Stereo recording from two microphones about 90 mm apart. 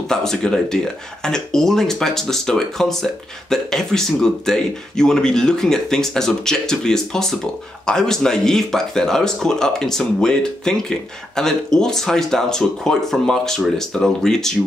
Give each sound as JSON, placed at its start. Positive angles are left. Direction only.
{"t": 0.1, "sound": "speech", "side_deg": 5}